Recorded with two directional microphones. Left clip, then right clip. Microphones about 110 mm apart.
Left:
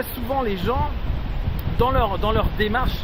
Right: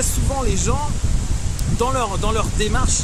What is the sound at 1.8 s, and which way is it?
Speech, 25° right (ahead or behind).